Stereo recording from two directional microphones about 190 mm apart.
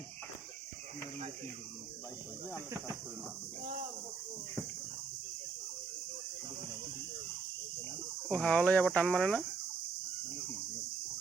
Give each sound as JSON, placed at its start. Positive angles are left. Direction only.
{"t": 8.3, "sound": "speech", "side_deg": 5}